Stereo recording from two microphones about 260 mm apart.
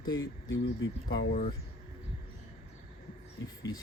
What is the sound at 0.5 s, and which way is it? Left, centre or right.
Speech, left.